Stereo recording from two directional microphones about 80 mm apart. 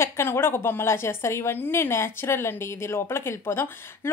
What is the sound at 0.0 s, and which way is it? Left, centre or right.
A woman's voice, left.